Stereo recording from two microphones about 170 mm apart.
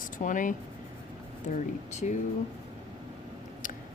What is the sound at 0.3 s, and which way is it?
Speech, 50° left (ahead or behind).